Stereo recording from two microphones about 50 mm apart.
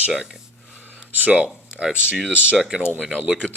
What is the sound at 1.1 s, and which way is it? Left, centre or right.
Speech, right.